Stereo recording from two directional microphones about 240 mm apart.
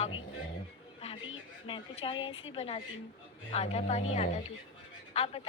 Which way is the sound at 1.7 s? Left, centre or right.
Left.